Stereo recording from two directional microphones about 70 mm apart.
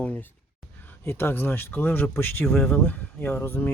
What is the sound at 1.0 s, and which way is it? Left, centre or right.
Speech, left.